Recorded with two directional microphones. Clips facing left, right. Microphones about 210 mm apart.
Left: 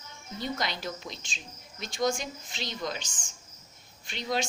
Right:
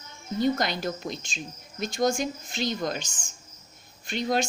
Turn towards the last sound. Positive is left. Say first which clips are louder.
# right 5 dB
turn(degrees=-45)  # may be behind; listen again after turning